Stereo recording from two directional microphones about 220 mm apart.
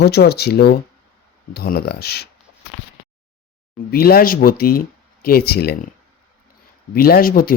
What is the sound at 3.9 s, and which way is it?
Speech, 45° left (ahead or behind).